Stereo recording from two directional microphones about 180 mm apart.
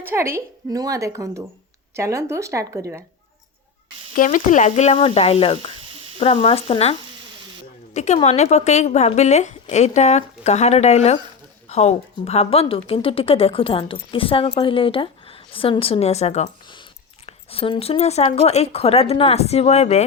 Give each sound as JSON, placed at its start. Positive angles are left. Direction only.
{"t": 0.0, "sound": "a woman's voice", "side_deg": -15}
{"t": 4.1, "sound": "a woman's voice", "side_deg": 50}
{"t": 7.9, "sound": "a woman's voice", "side_deg": 40}